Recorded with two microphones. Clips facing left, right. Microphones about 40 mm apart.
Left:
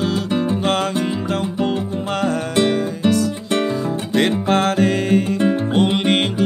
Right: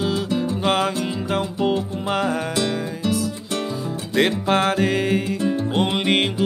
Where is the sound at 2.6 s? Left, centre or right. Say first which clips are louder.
Left 6 dB; left.